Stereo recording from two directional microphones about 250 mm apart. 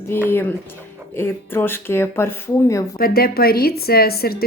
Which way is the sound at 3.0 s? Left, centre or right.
Left.